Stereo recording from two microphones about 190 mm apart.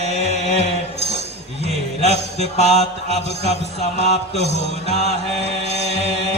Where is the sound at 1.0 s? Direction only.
35° right (ahead or behind).